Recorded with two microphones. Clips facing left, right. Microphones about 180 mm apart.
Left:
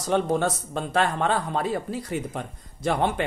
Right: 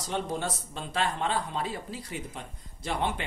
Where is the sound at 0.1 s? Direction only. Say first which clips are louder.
Left 9 dB; 50° left (ahead or behind).